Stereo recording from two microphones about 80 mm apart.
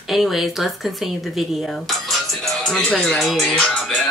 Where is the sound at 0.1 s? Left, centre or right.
Centre.